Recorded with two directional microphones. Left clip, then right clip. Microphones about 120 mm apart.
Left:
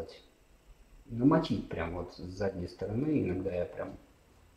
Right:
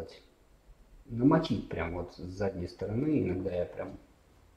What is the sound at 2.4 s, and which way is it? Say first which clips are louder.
Speech: right 1 dB; 20° right (ahead or behind).